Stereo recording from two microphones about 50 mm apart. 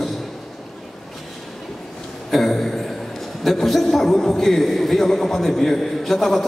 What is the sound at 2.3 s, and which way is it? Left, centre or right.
A man's voice, centre.